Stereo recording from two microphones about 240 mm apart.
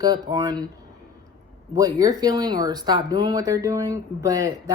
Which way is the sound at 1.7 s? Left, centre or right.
Centre.